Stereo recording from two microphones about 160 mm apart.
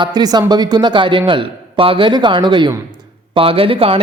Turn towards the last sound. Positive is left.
turn(degrees=-35)  # may be behind; listen again after turning